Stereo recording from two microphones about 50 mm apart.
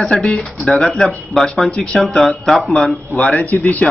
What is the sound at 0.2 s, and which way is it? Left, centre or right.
Speech, left.